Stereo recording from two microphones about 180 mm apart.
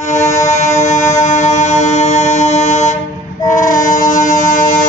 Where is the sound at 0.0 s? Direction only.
40° left (ahead or behind).